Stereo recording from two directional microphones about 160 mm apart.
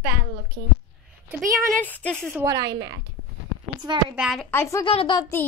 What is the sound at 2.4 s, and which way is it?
Speech, 25° right (ahead or behind).